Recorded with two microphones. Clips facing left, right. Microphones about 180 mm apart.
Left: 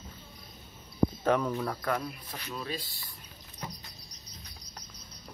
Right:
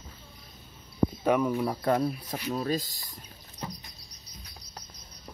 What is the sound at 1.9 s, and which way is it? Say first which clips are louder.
Speech: right 7 dB; 40° right (ahead or behind).